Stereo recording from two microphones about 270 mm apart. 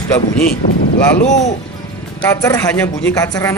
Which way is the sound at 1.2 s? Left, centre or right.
Left.